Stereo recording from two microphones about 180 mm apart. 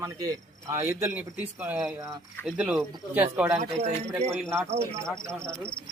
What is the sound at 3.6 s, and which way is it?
Speech, 35° right (ahead or behind).